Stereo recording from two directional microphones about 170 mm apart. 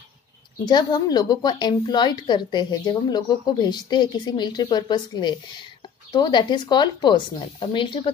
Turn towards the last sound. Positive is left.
turn(degrees=30)  # may be behind; listen again after turning